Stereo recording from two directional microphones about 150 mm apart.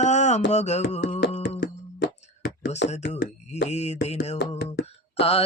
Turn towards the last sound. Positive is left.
turn(degrees=40)  # may be behind; listen again after turning